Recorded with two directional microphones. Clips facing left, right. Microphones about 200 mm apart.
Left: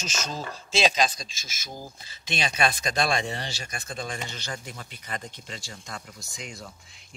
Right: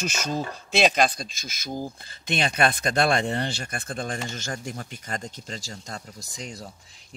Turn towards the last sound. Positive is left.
turn(degrees=-35)  # may be behind; listen again after turning